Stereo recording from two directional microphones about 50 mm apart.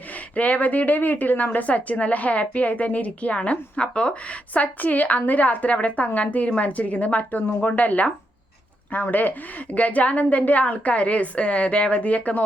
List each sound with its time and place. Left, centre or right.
0.3 s a woman's voice: left